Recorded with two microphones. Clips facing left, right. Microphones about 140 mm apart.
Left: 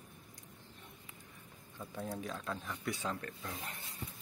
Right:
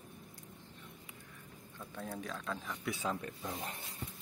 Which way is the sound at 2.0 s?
5° left (ahead or behind).